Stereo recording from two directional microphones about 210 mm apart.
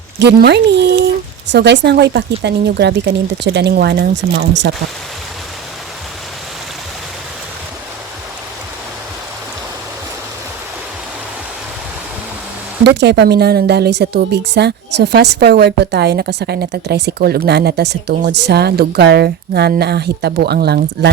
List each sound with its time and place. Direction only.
0.2 s speech: 50° right (ahead or behind)
12.8 s speech: 55° right (ahead or behind)